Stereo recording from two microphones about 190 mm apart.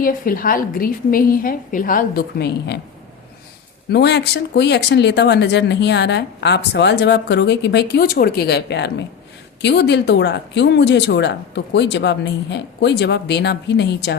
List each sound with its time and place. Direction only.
0.0 s a woman's voice: 50° left (ahead or behind)
3.8 s speech: 60° left (ahead or behind)